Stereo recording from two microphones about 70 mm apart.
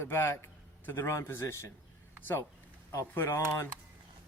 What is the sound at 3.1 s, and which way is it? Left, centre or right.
Speech, left.